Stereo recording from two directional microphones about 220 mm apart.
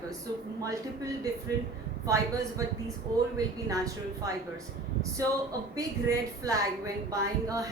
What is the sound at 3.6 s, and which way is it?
Speech, 15° right (ahead or behind).